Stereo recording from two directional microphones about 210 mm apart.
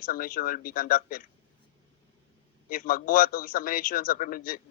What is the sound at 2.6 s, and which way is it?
Speech, 45° left (ahead or behind).